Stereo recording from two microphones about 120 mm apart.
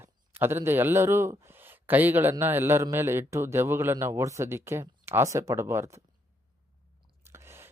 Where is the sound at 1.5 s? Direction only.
15° right (ahead or behind).